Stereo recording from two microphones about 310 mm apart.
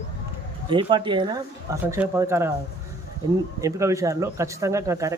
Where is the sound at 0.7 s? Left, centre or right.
Centre.